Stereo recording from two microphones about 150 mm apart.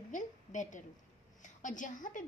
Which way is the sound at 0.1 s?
55° left (ahead or behind).